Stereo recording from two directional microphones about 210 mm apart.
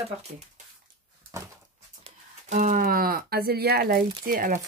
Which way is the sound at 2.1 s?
35° right (ahead or behind).